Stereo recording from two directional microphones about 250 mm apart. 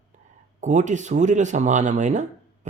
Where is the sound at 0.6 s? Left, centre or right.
Right.